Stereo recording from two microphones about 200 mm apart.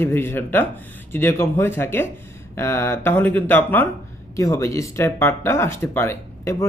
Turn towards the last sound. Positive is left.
turn(degrees=15)  # may be behind; listen again after turning